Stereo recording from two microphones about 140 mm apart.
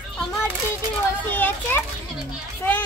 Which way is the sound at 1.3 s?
15° left (ahead or behind).